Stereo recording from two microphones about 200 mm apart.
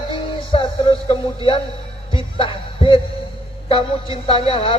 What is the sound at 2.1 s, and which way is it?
Music, 25° left (ahead or behind).